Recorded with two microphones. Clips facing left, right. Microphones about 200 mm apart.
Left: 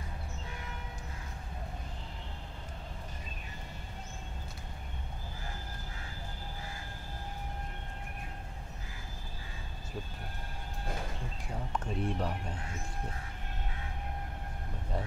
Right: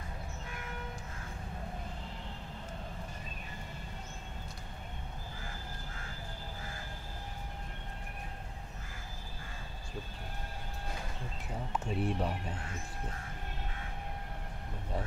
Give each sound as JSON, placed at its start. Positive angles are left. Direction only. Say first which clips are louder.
{"t": 11.7, "sound": "speech", "louder": "right 1 dB", "side_deg": -5}